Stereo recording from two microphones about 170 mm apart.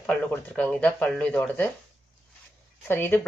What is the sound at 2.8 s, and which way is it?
Speech, 10° left (ahead or behind).